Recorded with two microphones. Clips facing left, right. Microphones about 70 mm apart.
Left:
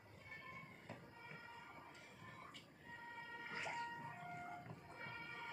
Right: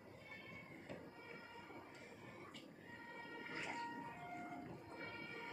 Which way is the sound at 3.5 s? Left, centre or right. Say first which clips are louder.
Left 1 dB; centre.